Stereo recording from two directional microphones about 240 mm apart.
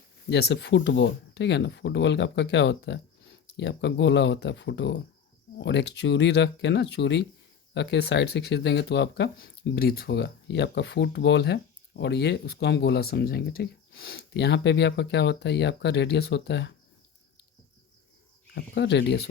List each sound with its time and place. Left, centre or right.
0.3 s speech: left
18.5 s speech: left